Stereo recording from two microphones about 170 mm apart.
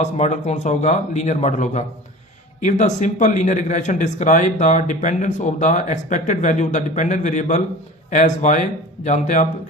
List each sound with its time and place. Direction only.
0.0 s speech: 45° left (ahead or behind)